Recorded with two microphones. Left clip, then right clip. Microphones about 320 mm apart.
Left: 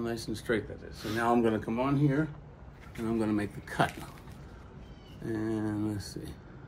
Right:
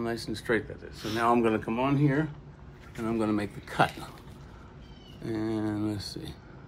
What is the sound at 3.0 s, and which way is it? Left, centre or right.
Speech, centre.